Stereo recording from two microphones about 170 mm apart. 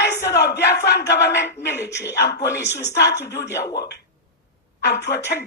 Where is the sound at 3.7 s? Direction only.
75° left (ahead or behind).